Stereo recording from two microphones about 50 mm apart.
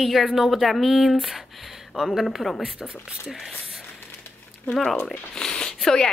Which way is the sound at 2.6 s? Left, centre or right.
Centre.